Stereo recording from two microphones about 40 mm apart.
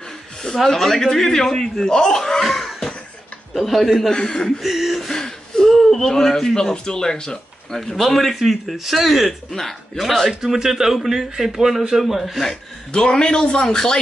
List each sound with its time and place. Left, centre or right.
0.7 s speech: centre
2.4 s a sound: centre
3.5 s speech: centre
4.1 s a man's voice: centre
4.6 s a sound: centre
5.1 s whimper: centre
5.7 s a man's voice: centre
7.7 s speech: centre
10.4 s a man's voice: centre
12.9 s a man's voice: left